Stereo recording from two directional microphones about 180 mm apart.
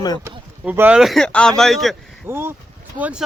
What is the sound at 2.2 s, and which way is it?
Speech, 15° right (ahead or behind).